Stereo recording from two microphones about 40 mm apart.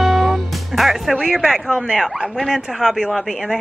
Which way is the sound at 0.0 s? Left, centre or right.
Centre.